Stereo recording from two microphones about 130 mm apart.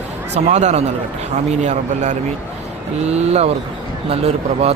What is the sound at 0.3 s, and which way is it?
Speech, 60° right (ahead or behind).